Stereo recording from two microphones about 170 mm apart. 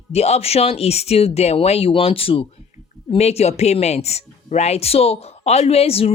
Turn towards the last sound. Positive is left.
turn(degrees=35)  # may be behind; listen again after turning